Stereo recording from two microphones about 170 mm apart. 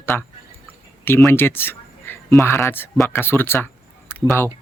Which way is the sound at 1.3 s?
15° left (ahead or behind).